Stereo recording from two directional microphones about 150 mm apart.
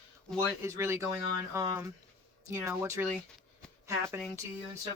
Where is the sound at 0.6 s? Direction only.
20° right (ahead or behind).